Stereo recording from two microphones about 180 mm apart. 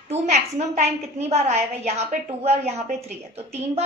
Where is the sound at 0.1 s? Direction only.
40° right (ahead or behind).